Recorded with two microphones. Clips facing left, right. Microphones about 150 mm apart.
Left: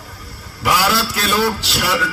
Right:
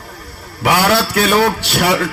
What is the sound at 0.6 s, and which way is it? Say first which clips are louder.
A man's voice: right 4 dB; 60° right (ahead or behind).